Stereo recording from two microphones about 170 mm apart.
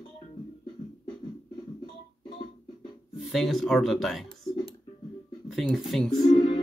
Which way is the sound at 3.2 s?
Centre (ahead or behind).